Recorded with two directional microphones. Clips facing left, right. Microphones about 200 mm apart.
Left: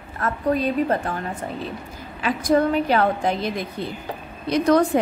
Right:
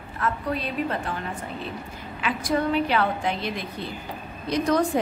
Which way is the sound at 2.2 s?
45° left (ahead or behind).